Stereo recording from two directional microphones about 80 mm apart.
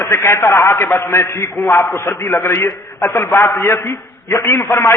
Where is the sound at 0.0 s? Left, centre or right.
Left.